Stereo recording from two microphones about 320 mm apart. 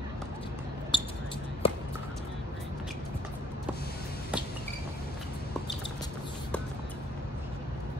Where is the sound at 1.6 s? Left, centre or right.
Centre.